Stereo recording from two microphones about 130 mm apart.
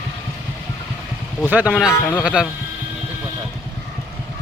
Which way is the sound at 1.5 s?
10° right (ahead or behind).